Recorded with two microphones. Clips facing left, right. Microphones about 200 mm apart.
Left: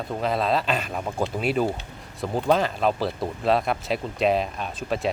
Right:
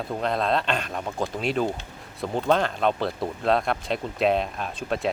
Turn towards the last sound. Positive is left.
turn(degrees=0)  # may be behind; listen again after turning